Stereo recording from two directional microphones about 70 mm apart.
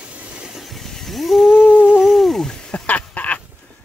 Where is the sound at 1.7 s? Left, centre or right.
Centre.